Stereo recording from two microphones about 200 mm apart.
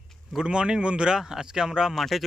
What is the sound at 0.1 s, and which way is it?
Speech, centre (ahead or behind).